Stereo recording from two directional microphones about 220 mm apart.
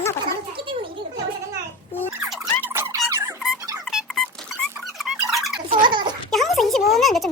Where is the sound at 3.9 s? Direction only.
Centre (ahead or behind).